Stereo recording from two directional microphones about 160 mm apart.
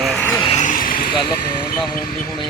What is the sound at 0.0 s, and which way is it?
Vehicle, centre (ahead or behind).